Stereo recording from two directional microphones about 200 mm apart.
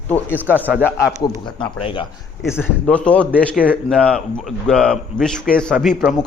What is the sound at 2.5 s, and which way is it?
A man's voice, 10° left (ahead or behind).